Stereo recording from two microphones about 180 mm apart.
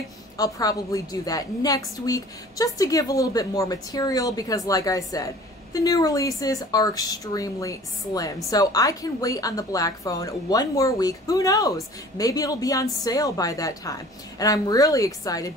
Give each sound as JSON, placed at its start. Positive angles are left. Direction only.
{"t": 0.4, "sound": "a woman's voice", "side_deg": 20}